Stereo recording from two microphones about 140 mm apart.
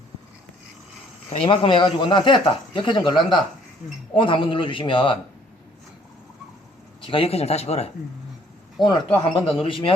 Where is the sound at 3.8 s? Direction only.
80° left.